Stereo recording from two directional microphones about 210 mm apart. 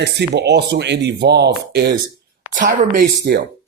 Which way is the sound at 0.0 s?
55° right (ahead or behind).